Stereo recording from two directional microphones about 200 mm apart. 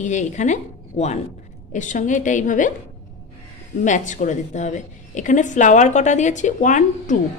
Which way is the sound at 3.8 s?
40° left (ahead or behind).